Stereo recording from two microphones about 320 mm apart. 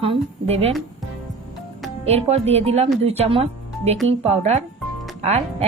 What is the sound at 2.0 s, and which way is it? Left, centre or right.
A woman's voice, centre.